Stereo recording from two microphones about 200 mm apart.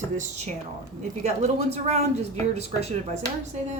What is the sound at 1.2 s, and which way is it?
A woman's voice, 35° right (ahead or behind).